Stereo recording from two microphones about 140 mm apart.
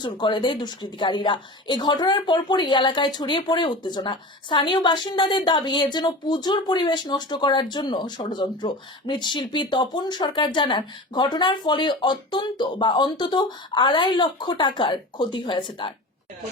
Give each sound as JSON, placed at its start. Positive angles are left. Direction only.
{"t": 0.0, "sound": "a woman's voice", "side_deg": 35}